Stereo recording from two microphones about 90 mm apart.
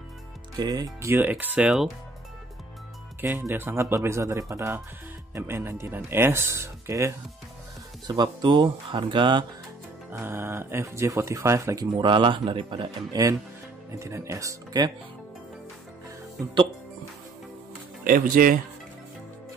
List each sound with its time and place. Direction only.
0.6 s speech: 45° right (ahead or behind)
1.0 s speech: 25° right (ahead or behind)
3.2 s speech: 25° right (ahead or behind)
8.1 s speech: 55° right (ahead or behind)
10.1 s speech: 25° right (ahead or behind)
11.8 s speech: 65° right (ahead or behind)
13.1 s speech: 40° right (ahead or behind)
14.7 s speech: 50° right (ahead or behind)